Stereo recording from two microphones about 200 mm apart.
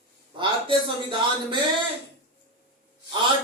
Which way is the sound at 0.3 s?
25° right (ahead or behind).